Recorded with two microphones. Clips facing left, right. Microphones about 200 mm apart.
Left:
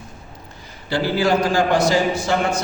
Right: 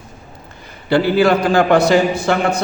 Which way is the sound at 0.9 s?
60° right (ahead or behind).